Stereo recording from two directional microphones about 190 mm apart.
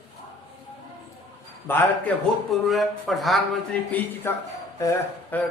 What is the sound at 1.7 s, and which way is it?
Speech, 10° left (ahead or behind).